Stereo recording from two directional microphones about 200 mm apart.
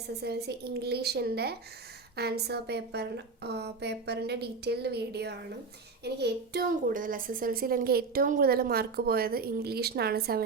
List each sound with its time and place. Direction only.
0.2 s a woman's voice: 55° right (ahead or behind)